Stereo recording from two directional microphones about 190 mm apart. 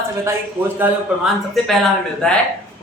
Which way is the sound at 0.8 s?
Centre (ahead or behind).